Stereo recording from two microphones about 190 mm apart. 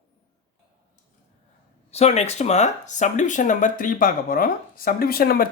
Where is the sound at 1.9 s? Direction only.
35° left (ahead or behind).